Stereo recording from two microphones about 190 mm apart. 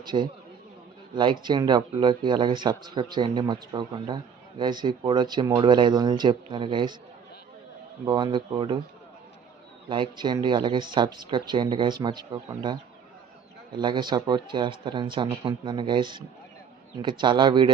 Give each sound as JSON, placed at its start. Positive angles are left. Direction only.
{"t": 0.0, "sound": "a man's voice", "side_deg": -25}
{"t": 8.0, "sound": "speech", "side_deg": -25}
{"t": 9.9, "sound": "speech", "side_deg": -25}
{"t": 13.7, "sound": "speech", "side_deg": -25}